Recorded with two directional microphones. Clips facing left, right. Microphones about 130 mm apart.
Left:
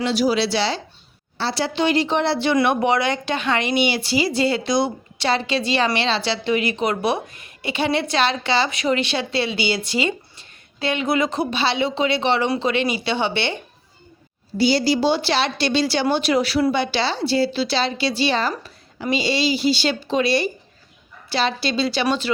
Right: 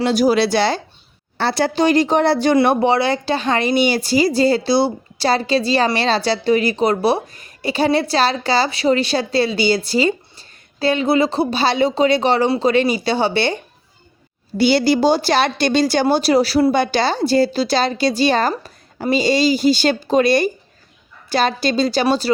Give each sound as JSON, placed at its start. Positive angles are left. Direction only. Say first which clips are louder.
{"t": 0.0, "sound": "speech", "louder": "right 4 dB", "side_deg": -45}
{"t": 2.6, "sound": "speech", "louder": "right 4 dB", "side_deg": -30}
{"t": 14.6, "sound": "speech", "louder": "right 4 dB", "side_deg": -65}